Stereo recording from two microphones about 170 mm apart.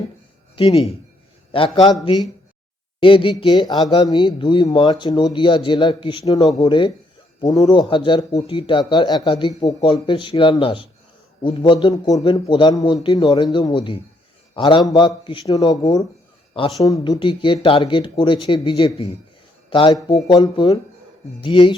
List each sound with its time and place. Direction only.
0.5 s a man's voice: 35° left (ahead or behind)
16.8 s speech: 20° left (ahead or behind)